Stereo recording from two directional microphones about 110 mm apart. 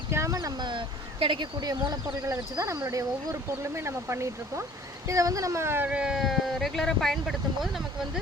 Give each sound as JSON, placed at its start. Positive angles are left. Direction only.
{"t": 0.1, "sound": "speech", "side_deg": -25}
{"t": 2.2, "sound": "speech", "side_deg": -30}